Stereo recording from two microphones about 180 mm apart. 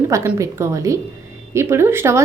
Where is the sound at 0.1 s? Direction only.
15° right (ahead or behind).